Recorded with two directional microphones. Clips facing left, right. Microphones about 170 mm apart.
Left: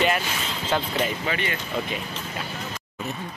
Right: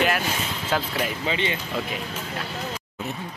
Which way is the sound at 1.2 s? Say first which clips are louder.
Right 2 dB; 20° right (ahead or behind).